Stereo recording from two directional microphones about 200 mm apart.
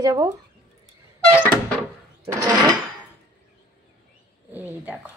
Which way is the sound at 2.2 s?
15° right (ahead or behind).